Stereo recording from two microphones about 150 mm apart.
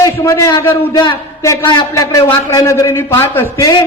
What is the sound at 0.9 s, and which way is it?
A man's voice, 30° left (ahead or behind).